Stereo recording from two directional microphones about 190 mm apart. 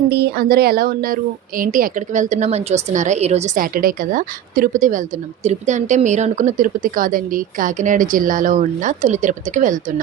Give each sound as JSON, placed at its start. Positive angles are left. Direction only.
{"t": 0.1, "sound": "speech", "side_deg": -55}